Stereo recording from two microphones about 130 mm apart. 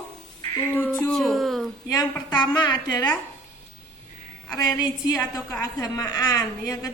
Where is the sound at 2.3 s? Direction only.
35° left (ahead or behind).